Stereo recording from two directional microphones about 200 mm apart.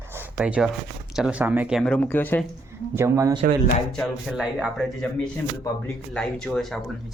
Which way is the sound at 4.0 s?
5° right (ahead or behind).